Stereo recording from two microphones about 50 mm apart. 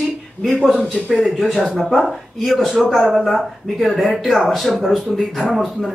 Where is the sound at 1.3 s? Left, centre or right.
Centre.